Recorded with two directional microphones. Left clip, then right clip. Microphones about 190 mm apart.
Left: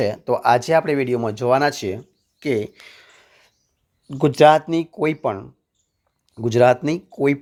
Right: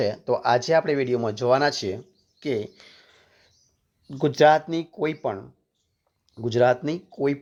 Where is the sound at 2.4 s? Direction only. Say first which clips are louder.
Left 5 dB; 30° left (ahead or behind).